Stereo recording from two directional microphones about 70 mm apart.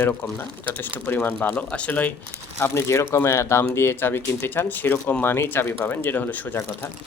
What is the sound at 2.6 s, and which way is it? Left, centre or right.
Speech, left.